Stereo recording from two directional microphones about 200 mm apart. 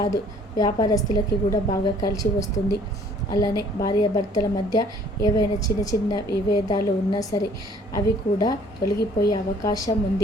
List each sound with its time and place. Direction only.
0.0 s a woman's voice: 20° left (ahead or behind)